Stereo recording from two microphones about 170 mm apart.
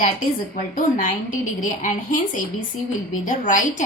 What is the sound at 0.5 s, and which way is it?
A woman's voice, 50° left (ahead or behind).